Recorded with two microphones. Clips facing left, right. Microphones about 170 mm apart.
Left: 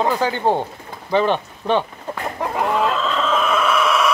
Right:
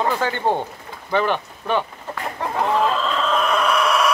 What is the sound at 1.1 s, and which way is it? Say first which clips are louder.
Speech: left 3 dB; 25° left (ahead or behind).